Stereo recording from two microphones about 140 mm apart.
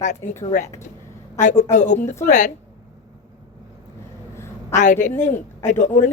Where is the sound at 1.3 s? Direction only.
60° left (ahead or behind).